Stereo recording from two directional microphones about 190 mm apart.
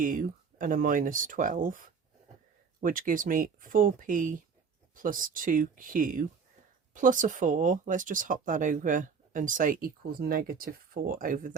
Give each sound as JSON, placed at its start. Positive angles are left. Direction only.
{"t": 0.0, "sound": "speech", "side_deg": -45}